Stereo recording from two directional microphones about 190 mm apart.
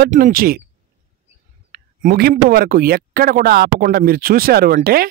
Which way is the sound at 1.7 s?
50° right (ahead or behind).